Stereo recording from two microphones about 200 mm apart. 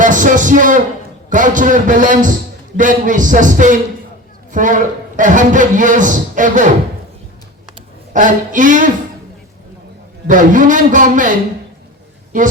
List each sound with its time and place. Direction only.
0.0 s a man's voice: 40° right (ahead or behind)
8.1 s a man's voice: 40° right (ahead or behind)
10.2 s a man's voice: 40° right (ahead or behind)